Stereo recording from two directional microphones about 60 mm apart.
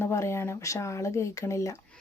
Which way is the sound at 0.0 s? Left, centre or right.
Left.